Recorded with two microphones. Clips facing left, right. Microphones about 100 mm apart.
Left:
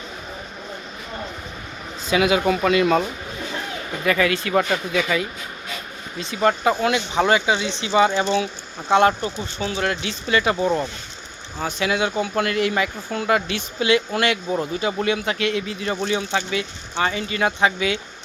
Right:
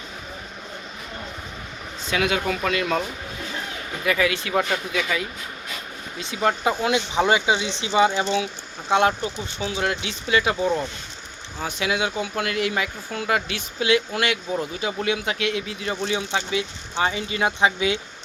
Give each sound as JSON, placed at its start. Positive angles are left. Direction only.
{"t": 2.0, "sound": "speech", "side_deg": 10}
{"t": 4.0, "sound": "speech", "side_deg": -10}
{"t": 6.1, "sound": "speech", "side_deg": -10}
{"t": 6.8, "sound": "speech", "side_deg": -20}
{"t": 11.6, "sound": "speech", "side_deg": -10}